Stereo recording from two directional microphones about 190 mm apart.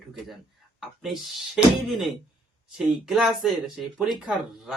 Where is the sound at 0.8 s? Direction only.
Centre (ahead or behind).